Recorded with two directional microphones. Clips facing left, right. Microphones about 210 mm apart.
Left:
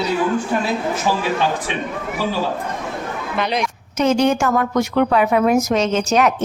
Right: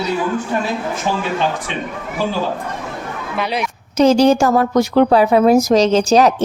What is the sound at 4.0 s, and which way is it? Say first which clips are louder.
A woman's voice: right 5 dB; 35° right (ahead or behind).